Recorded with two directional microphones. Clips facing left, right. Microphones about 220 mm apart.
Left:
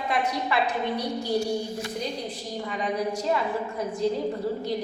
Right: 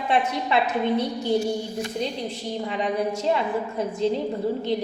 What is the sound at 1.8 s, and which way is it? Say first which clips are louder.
A woman's voice: right 3 dB; 25° right (ahead or behind).